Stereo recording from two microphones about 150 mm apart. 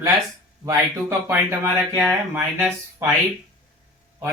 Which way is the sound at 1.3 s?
15° right (ahead or behind).